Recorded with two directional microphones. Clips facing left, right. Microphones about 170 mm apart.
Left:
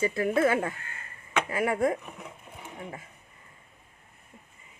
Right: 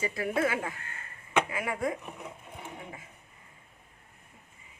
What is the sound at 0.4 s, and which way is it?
Speech, 50° left (ahead or behind).